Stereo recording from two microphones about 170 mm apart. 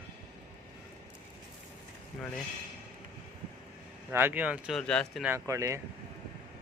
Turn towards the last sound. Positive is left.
turn(degrees=-20)  # may be behind; listen again after turning